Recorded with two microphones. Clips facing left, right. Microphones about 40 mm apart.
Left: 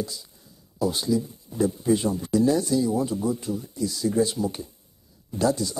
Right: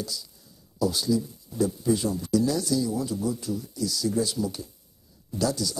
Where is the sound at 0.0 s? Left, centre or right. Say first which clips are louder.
Left 3 dB; left.